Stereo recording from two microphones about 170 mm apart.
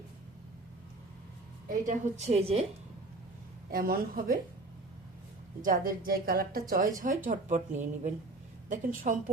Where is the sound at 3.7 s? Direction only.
60° right (ahead or behind).